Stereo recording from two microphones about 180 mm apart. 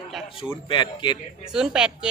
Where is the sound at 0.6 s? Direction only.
25° left (ahead or behind).